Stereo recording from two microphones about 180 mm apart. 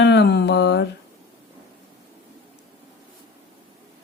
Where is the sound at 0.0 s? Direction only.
70° left (ahead or behind).